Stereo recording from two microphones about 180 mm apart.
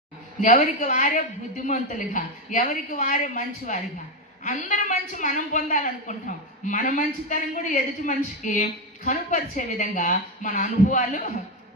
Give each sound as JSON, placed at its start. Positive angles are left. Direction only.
{"t": 0.4, "sound": "a woman's voice", "side_deg": 45}